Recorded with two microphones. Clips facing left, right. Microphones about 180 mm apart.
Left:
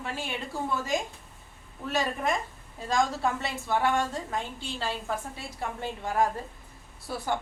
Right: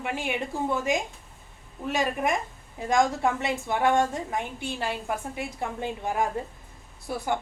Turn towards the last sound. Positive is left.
turn(degrees=-15)  # may be behind; listen again after turning